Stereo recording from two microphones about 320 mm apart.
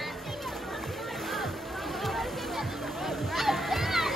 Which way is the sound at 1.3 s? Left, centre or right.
Centre.